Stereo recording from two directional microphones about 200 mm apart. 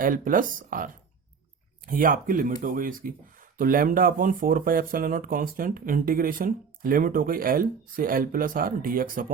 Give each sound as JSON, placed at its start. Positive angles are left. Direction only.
{"t": 0.0, "sound": "speech", "side_deg": -45}
{"t": 1.9, "sound": "speech", "side_deg": -45}